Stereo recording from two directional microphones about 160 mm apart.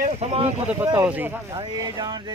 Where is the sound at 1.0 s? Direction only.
10° right (ahead or behind).